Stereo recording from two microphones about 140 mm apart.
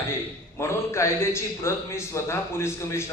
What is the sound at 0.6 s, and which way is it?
A man's voice, 20° left (ahead or behind).